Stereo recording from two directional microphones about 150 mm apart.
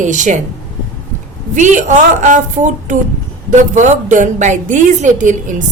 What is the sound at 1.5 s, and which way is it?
A woman's voice, 55° right (ahead or behind).